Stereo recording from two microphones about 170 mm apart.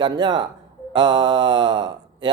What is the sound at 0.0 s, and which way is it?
Speech, 25° right (ahead or behind).